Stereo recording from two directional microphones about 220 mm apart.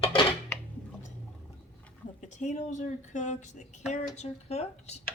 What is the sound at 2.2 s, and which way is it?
A woman's voice, 30° left (ahead or behind).